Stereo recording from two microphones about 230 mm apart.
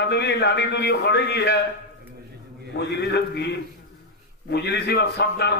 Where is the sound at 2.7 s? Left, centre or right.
Left.